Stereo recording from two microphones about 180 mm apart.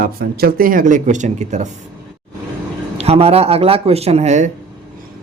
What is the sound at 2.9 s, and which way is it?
Speech, 35° right (ahead or behind).